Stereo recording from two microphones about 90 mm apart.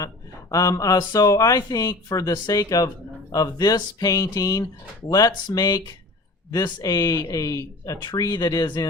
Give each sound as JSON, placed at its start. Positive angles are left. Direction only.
{"t": 0.5, "sound": "speech", "side_deg": 40}